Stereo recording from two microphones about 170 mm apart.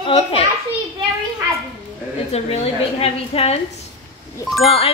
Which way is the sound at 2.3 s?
35° left (ahead or behind).